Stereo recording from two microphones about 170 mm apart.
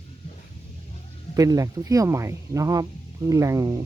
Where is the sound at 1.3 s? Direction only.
20° right (ahead or behind).